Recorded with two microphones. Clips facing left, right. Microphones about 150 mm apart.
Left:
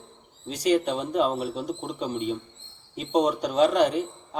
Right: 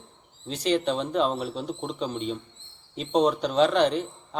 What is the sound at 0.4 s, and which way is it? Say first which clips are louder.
A man's voice: left 2 dB; 10° left (ahead or behind).